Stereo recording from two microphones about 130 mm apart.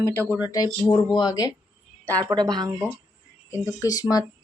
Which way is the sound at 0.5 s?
35° left (ahead or behind).